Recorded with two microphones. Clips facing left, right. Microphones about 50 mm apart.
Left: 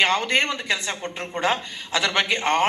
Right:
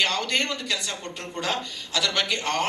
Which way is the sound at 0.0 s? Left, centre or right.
Left.